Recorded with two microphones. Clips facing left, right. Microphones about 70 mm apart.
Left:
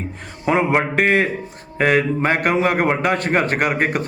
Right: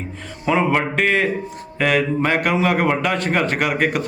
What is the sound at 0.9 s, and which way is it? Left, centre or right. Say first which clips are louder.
A man's voice: left 1 dB; left.